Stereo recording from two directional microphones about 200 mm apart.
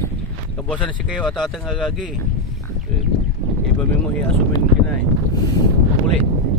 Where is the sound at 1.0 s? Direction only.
Centre (ahead or behind).